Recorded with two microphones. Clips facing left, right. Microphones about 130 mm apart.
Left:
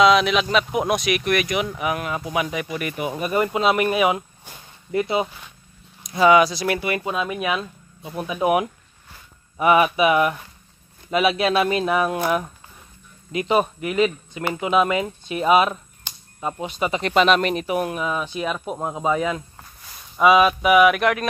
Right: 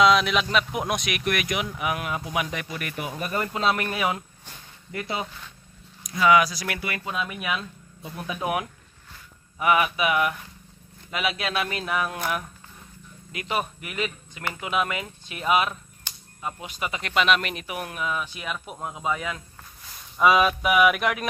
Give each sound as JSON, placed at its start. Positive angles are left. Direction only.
{"t": 0.0, "sound": "speech", "side_deg": 0}
{"t": 13.3, "sound": "speech", "side_deg": 25}
{"t": 20.2, "sound": "speech", "side_deg": 5}